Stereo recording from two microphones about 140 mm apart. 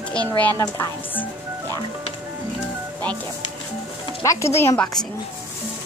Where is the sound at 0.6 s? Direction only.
15° left (ahead or behind).